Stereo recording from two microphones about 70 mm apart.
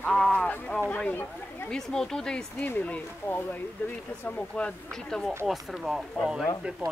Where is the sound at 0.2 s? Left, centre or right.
Centre.